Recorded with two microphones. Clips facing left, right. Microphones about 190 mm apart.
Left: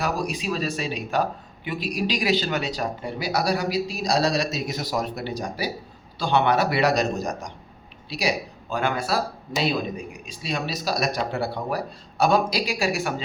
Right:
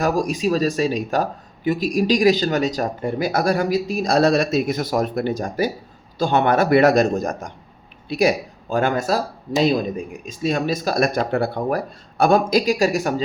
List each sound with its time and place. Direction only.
0.0 s speech: 45° right (ahead or behind)